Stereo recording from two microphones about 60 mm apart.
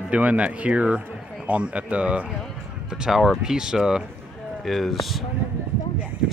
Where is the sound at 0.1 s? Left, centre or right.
Right.